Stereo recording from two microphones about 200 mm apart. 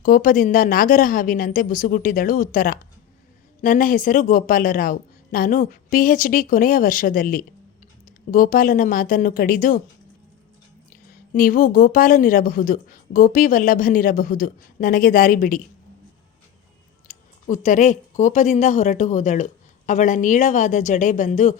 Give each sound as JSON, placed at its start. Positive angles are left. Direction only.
{"t": 0.0, "sound": "a woman's voice", "side_deg": 45}
{"t": 10.8, "sound": "a woman's voice", "side_deg": 45}
{"t": 17.1, "sound": "speech", "side_deg": 35}